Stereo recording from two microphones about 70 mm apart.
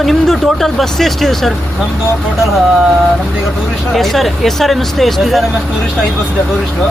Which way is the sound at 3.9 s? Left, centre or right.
Centre.